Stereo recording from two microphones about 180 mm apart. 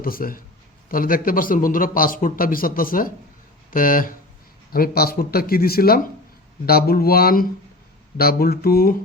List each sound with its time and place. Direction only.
0.0 s a man's voice: 50° left (ahead or behind)